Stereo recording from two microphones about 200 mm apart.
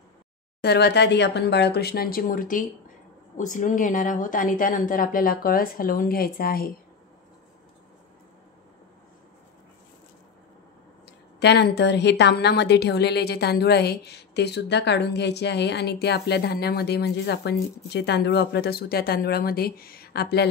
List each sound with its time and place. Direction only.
0.6 s a woman's voice: 55° left (ahead or behind)
11.3 s a woman's voice: 55° left (ahead or behind)